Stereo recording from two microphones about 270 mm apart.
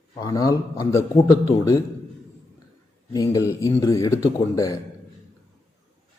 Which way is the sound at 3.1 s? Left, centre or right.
Centre.